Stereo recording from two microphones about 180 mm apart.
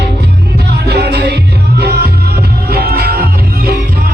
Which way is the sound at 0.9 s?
65° right (ahead or behind).